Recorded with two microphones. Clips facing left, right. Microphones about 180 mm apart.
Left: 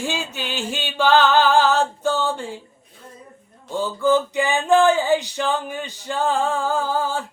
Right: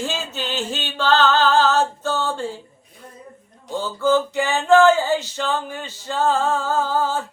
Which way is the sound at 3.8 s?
15° left (ahead or behind).